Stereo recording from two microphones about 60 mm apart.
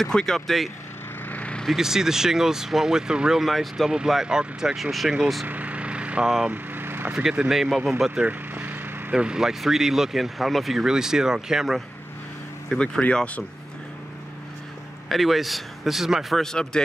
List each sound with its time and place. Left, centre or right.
0.0 s speech: centre
1.3 s vehicle: left
1.8 s speech: centre
5.5 s vehicle: right
6.5 s vehicle: right
7.3 s speech: centre
8.3 s vehicle: right
9.1 s speech: centre
12.6 s speech: centre
15.0 s a man's voice: centre
16.4 s speech: centre